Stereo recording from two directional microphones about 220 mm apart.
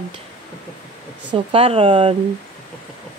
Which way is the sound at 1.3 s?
25° right (ahead or behind).